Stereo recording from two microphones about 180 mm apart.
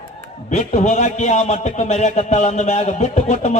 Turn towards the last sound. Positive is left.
turn(degrees=40)  # may be behind; listen again after turning